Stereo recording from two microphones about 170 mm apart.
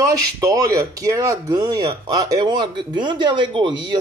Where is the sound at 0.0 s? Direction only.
20° right (ahead or behind).